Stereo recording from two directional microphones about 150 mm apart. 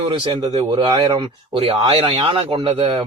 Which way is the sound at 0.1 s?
25° right (ahead or behind).